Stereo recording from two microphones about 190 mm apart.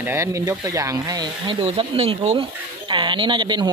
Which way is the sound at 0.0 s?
15° right (ahead or behind).